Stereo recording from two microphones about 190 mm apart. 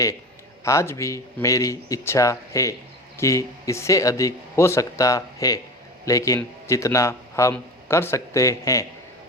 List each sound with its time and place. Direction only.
0.6 s a man's voice: 15° left (ahead or behind)